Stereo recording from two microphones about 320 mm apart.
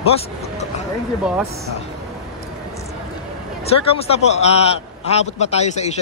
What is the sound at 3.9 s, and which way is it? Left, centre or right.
A man's voice, centre.